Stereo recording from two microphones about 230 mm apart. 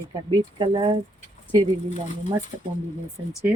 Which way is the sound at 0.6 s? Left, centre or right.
Right.